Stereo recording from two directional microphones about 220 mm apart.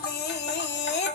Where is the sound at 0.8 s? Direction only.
55° left (ahead or behind).